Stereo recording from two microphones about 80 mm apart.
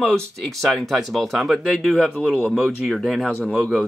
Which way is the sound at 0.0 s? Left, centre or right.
Centre.